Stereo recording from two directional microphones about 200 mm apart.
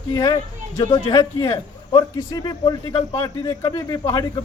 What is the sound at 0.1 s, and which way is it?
A man's voice, 20° left (ahead or behind).